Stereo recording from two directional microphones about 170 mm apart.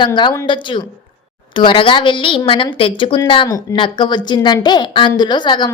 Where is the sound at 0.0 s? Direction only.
25° left (ahead or behind).